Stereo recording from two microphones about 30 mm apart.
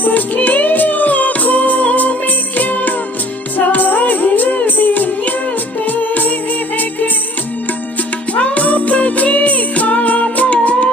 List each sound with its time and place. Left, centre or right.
0.0 s music: left
4.3 s music: left
8.4 s music: left